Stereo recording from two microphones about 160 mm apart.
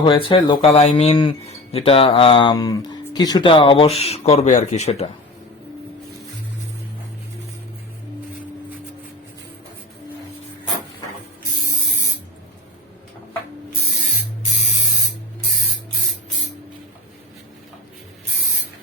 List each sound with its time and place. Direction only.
0.0 s speech: 35° left (ahead or behind)